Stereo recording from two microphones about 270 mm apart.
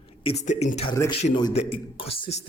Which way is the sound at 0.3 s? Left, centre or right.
Left.